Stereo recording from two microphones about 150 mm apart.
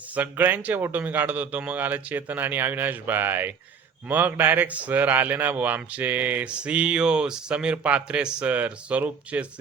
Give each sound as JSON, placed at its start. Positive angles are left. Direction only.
{"t": 0.1, "sound": "speech", "side_deg": -10}